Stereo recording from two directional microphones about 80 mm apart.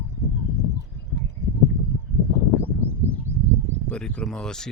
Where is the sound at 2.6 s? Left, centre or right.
Right.